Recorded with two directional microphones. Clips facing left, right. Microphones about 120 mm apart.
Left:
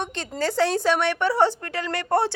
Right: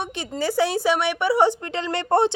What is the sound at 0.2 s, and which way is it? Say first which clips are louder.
A woman's voice: right 1 dB; 10° right (ahead or behind).